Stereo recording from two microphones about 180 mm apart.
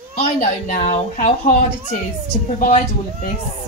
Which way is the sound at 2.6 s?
40° left (ahead or behind).